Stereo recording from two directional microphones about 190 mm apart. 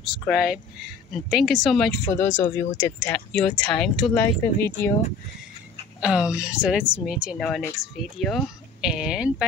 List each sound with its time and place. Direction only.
0.1 s speech: centre (ahead or behind)
3.3 s speech: 5° left (ahead or behind)
5.9 s speech: 5° right (ahead or behind)